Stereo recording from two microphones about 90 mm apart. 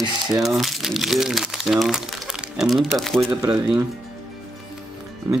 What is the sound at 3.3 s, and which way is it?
Speech, 40° right (ahead or behind).